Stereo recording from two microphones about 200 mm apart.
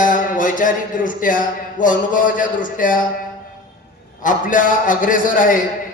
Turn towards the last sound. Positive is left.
turn(degrees=40)  # may be behind; listen again after turning